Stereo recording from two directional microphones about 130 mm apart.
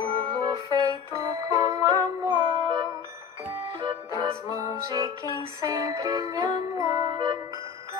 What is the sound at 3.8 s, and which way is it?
Music, 35° right (ahead or behind).